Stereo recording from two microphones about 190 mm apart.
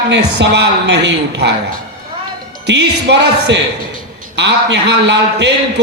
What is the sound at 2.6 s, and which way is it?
A man's voice, 65° right (ahead or behind).